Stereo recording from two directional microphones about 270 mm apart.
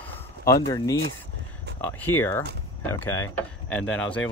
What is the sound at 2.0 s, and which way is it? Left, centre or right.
Speech, centre.